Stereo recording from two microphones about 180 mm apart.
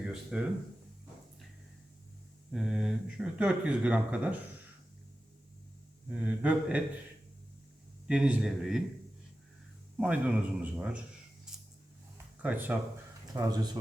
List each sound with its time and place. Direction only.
0.0 s speech: 5° right (ahead or behind)
2.5 s speech: centre (ahead or behind)
6.1 s a man's voice: 5° right (ahead or behind)
8.0 s speech: 5° right (ahead or behind)
10.0 s a man's voice: 5° right (ahead or behind)
12.1 s a sound: 10° right (ahead or behind)
13.3 s speech: 20° right (ahead or behind)